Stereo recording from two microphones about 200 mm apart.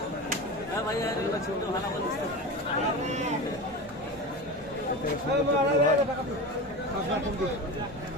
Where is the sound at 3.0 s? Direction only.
35° right (ahead or behind).